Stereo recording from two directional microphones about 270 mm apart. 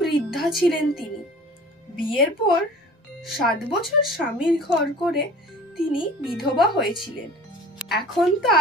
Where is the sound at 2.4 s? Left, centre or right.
Left.